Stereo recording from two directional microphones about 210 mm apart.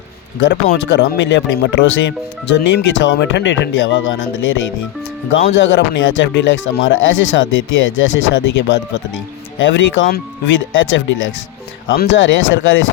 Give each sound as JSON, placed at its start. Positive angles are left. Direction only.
{"t": 0.4, "sound": "speech", "side_deg": 55}
{"t": 5.5, "sound": "speech", "side_deg": 55}